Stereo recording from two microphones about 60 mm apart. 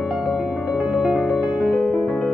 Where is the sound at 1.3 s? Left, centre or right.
Centre.